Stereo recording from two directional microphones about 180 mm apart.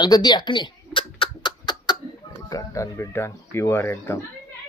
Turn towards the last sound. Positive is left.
turn(degrees=15)  # may be behind; listen again after turning